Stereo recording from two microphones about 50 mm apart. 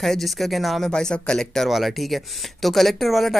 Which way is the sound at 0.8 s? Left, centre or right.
Centre.